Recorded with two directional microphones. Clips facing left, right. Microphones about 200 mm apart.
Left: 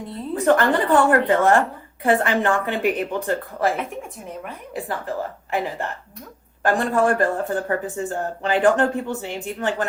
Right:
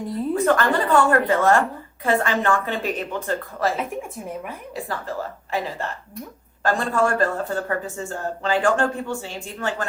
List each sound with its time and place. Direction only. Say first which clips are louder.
0.4 s a man's voice: left 4 dB; 15° left (ahead or behind)